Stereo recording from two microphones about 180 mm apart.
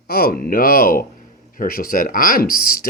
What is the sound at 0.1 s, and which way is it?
Speech, 55° left (ahead or behind).